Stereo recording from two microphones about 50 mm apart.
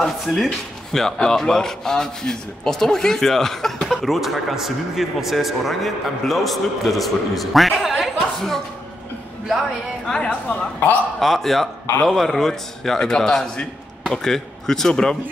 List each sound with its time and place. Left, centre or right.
0.0 s speech: centre
8.0 s a sound: centre
10.0 s speech: centre
11.1 s speech: centre